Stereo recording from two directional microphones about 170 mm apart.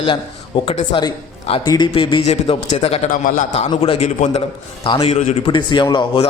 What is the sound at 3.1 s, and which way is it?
Speech, 50° left (ahead or behind).